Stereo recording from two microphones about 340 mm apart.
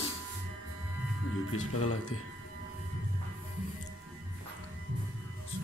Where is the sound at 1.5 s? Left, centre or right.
Left.